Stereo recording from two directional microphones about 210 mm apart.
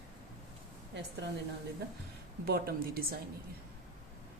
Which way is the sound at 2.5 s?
45° right (ahead or behind).